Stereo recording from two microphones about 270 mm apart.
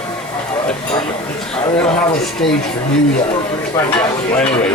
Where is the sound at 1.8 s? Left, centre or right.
Centre.